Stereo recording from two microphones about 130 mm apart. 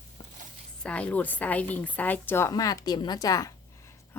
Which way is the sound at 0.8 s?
10° left (ahead or behind).